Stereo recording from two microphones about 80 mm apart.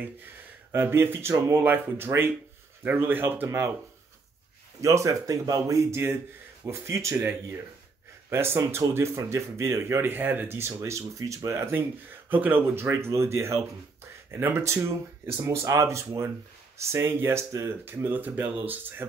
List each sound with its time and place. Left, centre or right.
0.7 s speech: right
4.8 s speech: right
17.8 s speech: right